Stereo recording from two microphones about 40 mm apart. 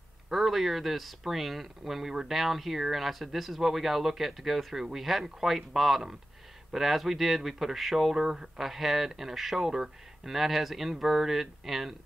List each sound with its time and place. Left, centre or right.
0.3 s speech: centre